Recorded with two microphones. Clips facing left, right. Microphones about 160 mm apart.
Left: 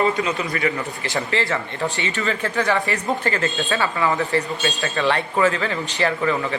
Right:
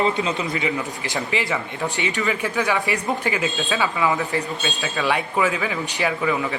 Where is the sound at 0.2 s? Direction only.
20° right (ahead or behind).